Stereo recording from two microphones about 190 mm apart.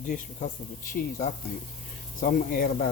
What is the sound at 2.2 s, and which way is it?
Speech, 45° left (ahead or behind).